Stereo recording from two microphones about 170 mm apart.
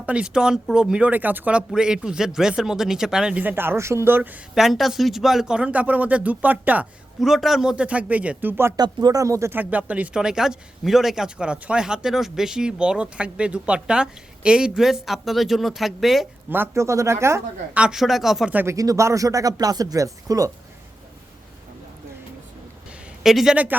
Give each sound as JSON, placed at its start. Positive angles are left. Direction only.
{"t": 0.0, "sound": "speech", "side_deg": -5}
{"t": 16.5, "sound": "a man's voice", "side_deg": -15}
{"t": 17.8, "sound": "speech", "side_deg": 0}
{"t": 23.2, "sound": "speech", "side_deg": 0}